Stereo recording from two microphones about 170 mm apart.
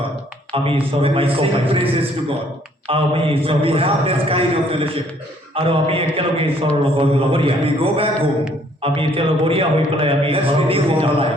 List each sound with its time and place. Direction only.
0.5 s a man's voice: 35° right (ahead or behind)